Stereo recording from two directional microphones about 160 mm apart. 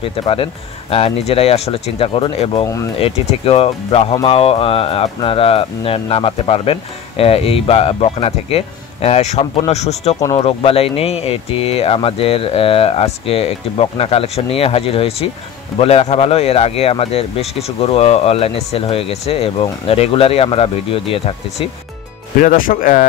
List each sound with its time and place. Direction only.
0.0 s speech: 35° left (ahead or behind)
2.6 s speech: 20° left (ahead or behind)
3.0 s speech: 40° left (ahead or behind)
22.4 s speech: 60° left (ahead or behind)